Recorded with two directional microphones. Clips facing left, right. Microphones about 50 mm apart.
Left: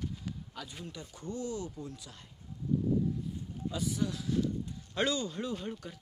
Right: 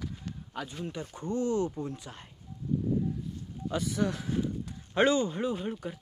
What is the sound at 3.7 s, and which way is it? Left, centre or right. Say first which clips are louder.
Speech: right 4 dB; right.